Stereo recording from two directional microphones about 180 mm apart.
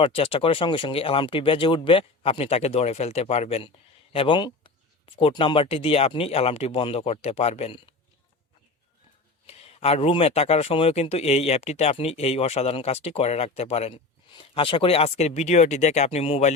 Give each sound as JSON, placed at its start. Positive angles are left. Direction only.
{"t": 0.0, "sound": "speech", "side_deg": 30}
{"t": 9.5, "sound": "speech", "side_deg": 35}